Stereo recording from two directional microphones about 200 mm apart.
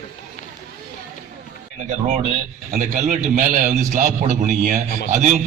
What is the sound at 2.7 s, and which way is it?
A man's voice, 40° right (ahead or behind).